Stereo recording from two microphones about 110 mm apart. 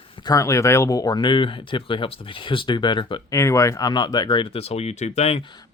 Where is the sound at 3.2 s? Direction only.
30° left (ahead or behind); by 4.6 s 45° left (ahead or behind).